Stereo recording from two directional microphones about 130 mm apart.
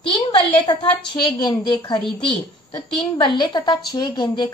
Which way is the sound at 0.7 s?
35° left (ahead or behind).